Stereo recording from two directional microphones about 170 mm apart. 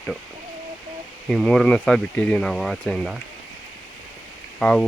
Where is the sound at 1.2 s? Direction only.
5° left (ahead or behind).